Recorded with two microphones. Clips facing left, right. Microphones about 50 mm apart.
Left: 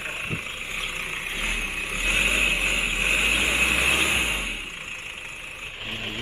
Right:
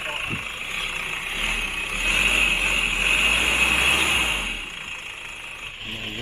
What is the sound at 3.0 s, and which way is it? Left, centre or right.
Vehicle, right.